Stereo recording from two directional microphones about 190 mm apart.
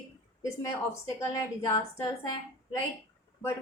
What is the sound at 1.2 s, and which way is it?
Speech, 15° left (ahead or behind).